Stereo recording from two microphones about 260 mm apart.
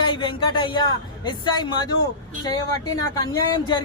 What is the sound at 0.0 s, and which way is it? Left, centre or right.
Speech, centre.